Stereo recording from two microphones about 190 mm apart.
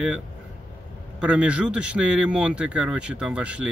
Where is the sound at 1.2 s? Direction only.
5° right (ahead or behind).